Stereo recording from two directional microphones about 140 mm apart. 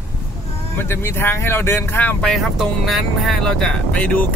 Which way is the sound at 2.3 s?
Centre (ahead or behind).